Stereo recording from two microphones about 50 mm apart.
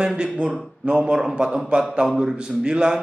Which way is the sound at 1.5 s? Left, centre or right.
Centre.